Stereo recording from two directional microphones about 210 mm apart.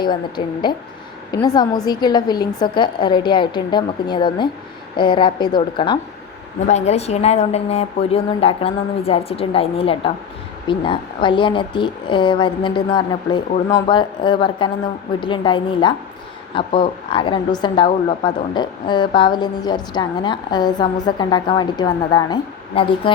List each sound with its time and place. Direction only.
0.0 s a woman's voice: 20° left (ahead or behind)